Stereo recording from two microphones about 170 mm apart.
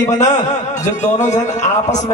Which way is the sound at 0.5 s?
45° left (ahead or behind).